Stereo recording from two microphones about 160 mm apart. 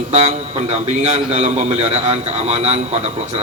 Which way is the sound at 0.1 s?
40° right (ahead or behind).